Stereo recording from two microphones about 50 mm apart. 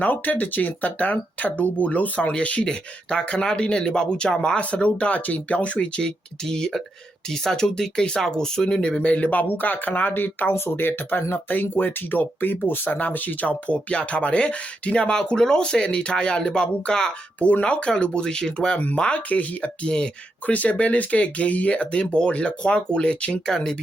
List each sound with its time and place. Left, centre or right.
0.0 s speech: left; by 4.6 s centre
4.7 s speech: left
6.0 s speech: centre
17.4 s speech: left
23.5 s speech: centre